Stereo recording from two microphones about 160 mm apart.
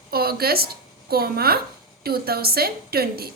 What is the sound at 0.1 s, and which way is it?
A woman's voice, 70° right (ahead or behind).